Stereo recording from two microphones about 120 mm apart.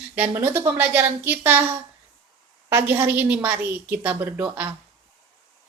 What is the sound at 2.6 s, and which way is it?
A woman's voice, 20° right (ahead or behind).